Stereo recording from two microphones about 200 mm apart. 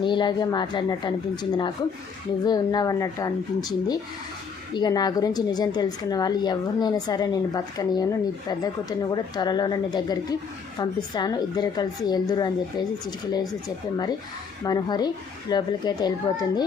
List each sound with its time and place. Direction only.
0.0 s a woman's voice: 25° left (ahead or behind)
14.6 s a woman's voice: 20° left (ahead or behind)